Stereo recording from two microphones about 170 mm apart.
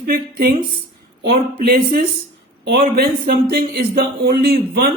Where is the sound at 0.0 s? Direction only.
60° right (ahead or behind).